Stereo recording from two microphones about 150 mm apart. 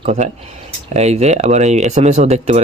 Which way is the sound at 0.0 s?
50° right (ahead or behind).